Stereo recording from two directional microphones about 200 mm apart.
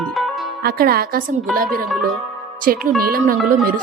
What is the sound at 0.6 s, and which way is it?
Speech, 50° right (ahead or behind).